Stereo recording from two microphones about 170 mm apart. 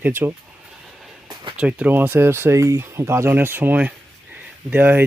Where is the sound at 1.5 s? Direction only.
5° right (ahead or behind).